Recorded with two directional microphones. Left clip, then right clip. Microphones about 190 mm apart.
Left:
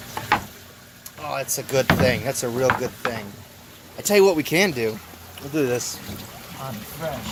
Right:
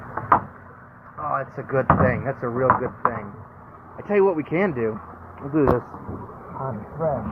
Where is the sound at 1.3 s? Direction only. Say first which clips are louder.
Left 1 dB; 45° left (ahead or behind).